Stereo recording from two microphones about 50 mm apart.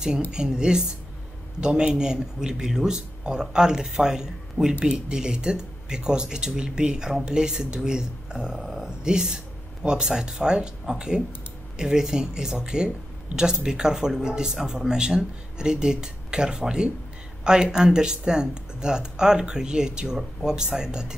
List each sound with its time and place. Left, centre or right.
0.3 s speech: centre
8.5 s speech: centre
8.8 s speech: centre